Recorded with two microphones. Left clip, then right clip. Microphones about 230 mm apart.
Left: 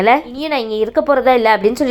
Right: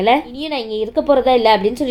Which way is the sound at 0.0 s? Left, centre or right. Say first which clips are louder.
Left 2 dB; centre.